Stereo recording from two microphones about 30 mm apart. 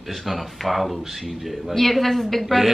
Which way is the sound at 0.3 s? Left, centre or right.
Centre.